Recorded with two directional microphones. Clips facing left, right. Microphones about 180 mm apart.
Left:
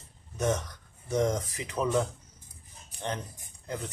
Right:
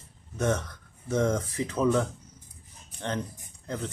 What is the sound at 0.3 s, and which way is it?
Speech, 15° left (ahead or behind).